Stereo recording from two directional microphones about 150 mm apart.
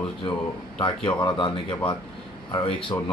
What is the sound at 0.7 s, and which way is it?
Speech, 35° left (ahead or behind).